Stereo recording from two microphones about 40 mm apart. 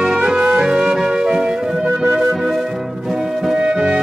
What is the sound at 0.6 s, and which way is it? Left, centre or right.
Music, centre.